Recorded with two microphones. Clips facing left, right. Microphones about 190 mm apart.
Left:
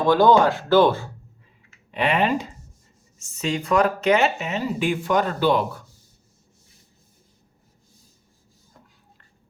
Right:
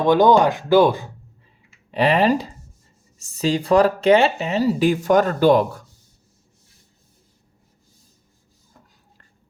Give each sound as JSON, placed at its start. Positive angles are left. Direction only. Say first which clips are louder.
{"t": 0.0, "sound": "speech", "louder": "right 2 dB", "side_deg": -20}
{"t": 1.9, "sound": "speech", "louder": "right 4 dB", "side_deg": -35}